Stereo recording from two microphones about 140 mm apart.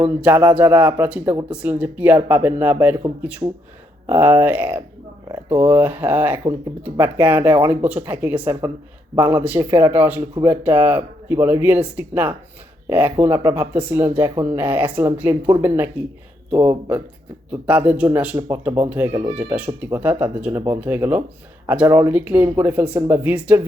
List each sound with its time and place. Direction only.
0.0 s speech: 15° right (ahead or behind)
4.0 s speech: 15° right (ahead or behind)